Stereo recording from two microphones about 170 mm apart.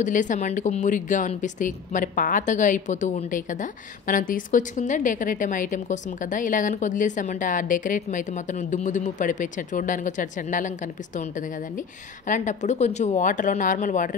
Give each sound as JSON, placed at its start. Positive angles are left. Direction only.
{"t": 0.0, "sound": "speech", "side_deg": 50}